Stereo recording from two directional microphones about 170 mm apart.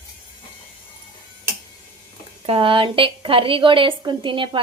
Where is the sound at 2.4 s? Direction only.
30° right (ahead or behind).